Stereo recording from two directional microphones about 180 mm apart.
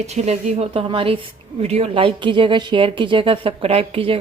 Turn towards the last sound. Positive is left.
turn(degrees=-30)  # may be behind; listen again after turning